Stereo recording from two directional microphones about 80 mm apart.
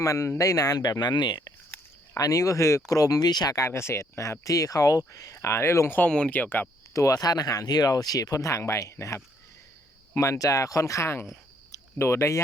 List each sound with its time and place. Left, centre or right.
0.0 s speech: left
0.8 s speech: left
2.1 s speech: left
3.5 s speech: left
6.0 s speech: centre
6.9 s speech: left